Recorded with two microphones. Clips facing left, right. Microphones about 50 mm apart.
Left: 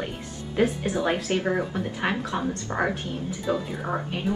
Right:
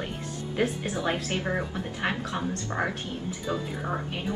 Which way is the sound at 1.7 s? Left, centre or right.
Centre.